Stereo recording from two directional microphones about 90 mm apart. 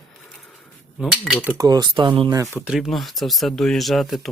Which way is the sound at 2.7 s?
Centre (ahead or behind).